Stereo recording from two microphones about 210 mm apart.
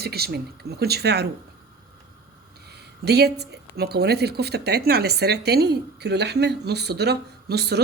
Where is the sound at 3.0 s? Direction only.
50° right (ahead or behind).